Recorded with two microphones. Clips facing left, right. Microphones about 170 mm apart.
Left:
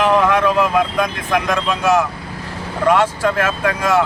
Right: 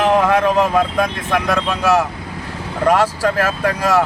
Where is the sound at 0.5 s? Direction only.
40° right (ahead or behind).